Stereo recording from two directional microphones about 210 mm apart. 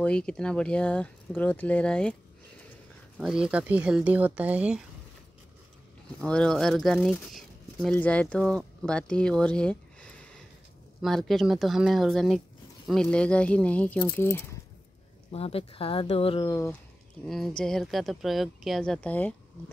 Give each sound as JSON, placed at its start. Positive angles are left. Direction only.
{"t": 0.0, "sound": "speech", "side_deg": 5}
{"t": 3.2, "sound": "speech", "side_deg": -5}
{"t": 6.2, "sound": "speech", "side_deg": 5}
{"t": 15.3, "sound": "speech", "side_deg": 30}
{"t": 17.3, "sound": "speech", "side_deg": 0}